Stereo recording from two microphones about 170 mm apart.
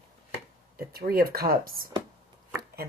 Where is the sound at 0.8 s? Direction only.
65° right (ahead or behind).